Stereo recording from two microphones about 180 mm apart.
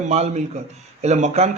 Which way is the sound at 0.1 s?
40° right (ahead or behind).